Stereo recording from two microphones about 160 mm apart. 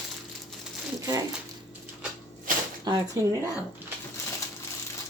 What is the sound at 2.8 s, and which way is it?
Speech, 25° right (ahead or behind).